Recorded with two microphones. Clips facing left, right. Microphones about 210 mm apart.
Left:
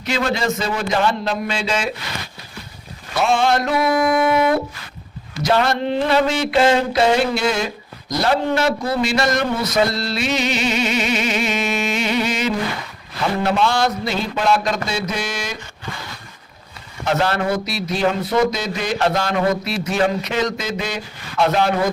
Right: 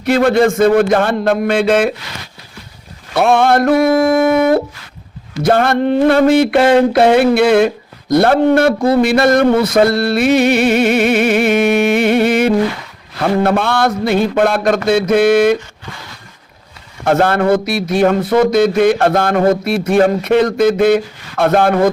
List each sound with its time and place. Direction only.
0.0 s speech: 55° right (ahead or behind)
3.2 s speech: 60° right (ahead or behind)
17.1 s speech: 50° right (ahead or behind)